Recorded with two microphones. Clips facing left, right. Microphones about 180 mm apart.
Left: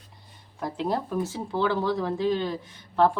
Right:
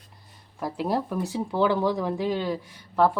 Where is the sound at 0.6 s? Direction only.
10° right (ahead or behind).